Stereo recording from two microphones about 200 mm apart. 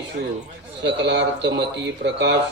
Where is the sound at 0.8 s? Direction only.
60° right (ahead or behind).